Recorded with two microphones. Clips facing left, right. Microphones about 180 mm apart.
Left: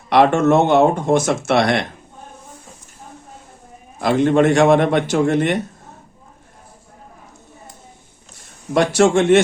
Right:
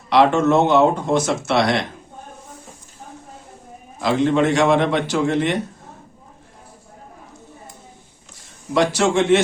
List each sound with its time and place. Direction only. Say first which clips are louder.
0.1 s speech: left 2 dB; 55° left (ahead or behind)
4.0 s speech: left 3 dB; 55° left (ahead or behind)
8.7 s speech: left 3 dB; 55° left (ahead or behind)